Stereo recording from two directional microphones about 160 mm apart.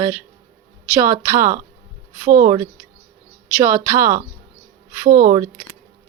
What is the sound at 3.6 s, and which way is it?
Speech, 20° right (ahead or behind).